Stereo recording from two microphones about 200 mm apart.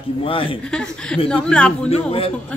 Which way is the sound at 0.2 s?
25° left (ahead or behind).